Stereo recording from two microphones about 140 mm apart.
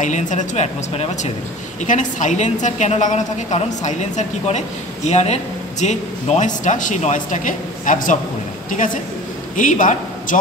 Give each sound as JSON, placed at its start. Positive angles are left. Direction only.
{"t": 0.0, "sound": "a woman's voice", "side_deg": 60}
{"t": 1.9, "sound": "a woman's voice", "side_deg": 65}